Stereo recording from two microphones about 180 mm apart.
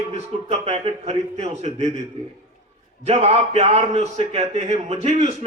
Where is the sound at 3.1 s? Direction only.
35° right (ahead or behind).